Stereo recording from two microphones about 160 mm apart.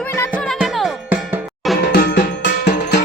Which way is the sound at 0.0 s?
15° left (ahead or behind).